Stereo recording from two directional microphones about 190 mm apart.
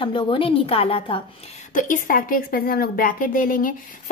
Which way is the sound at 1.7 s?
45° left (ahead or behind).